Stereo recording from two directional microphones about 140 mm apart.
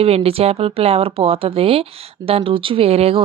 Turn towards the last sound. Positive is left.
turn(degrees=-45)  # may be behind; listen again after turning